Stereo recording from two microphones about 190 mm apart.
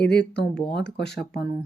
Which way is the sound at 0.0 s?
60° left (ahead or behind).